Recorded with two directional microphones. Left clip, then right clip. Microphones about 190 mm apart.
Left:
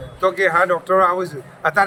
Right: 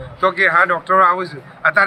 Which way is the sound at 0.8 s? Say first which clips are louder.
Right 4 dB; 35° left (ahead or behind).